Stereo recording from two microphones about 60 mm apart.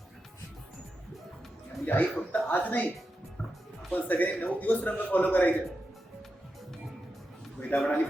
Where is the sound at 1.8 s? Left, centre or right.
Left.